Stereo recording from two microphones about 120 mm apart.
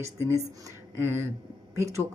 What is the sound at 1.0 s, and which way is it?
A woman's voice, 20° right (ahead or behind).